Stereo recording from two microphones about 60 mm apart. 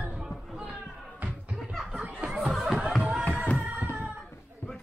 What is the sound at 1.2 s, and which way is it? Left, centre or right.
Music, right.